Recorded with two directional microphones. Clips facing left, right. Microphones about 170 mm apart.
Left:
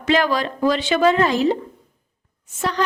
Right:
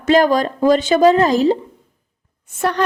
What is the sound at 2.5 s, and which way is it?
Speech, 60° right (ahead or behind).